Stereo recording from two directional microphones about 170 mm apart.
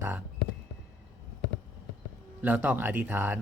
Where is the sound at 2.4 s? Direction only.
10° right (ahead or behind).